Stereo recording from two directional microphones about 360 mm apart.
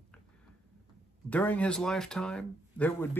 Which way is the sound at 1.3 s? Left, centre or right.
Centre.